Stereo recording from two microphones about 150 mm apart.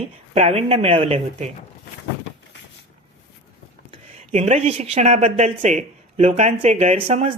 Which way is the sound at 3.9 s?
45° right (ahead or behind).